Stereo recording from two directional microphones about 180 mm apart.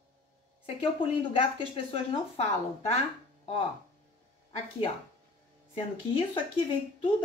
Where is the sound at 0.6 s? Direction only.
30° left (ahead or behind).